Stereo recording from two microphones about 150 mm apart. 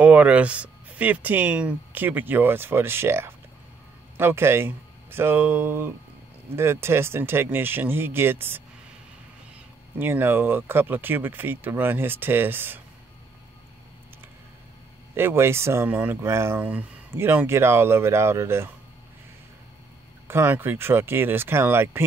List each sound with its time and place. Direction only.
0.0 s speech: 10° right (ahead or behind)
9.9 s speech: 15° right (ahead or behind)
15.1 s speech: 15° right (ahead or behind)
20.2 s speech: 15° right (ahead or behind)